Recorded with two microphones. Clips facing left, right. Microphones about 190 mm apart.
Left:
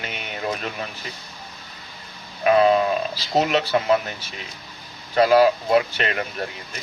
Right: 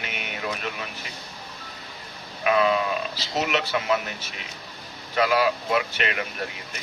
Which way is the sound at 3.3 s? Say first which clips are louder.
Left 6 dB; 35° left (ahead or behind).